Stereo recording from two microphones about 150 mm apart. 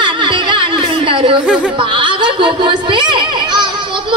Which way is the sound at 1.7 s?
35° right (ahead or behind).